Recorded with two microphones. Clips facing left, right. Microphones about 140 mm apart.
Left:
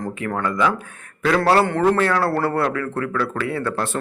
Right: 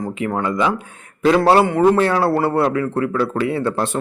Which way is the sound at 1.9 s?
25° right (ahead or behind).